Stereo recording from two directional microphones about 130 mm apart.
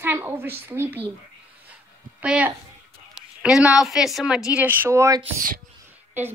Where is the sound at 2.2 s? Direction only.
10° right (ahead or behind).